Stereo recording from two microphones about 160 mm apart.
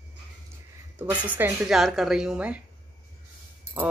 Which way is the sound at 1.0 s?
10° right (ahead or behind).